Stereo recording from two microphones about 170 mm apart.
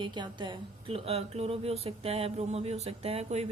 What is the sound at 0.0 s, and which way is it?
Speech, 25° right (ahead or behind).